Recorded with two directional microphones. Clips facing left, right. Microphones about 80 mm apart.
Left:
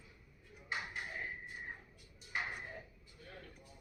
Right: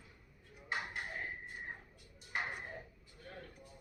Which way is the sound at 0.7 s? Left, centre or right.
Right.